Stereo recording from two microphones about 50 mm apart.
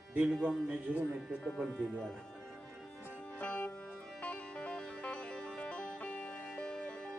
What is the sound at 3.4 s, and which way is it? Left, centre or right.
Music, left.